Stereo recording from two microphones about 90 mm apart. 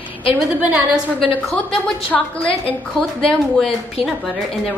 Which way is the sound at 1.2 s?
5° left (ahead or behind).